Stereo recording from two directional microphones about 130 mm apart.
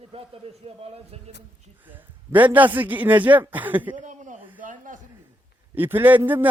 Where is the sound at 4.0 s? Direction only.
70° right (ahead or behind).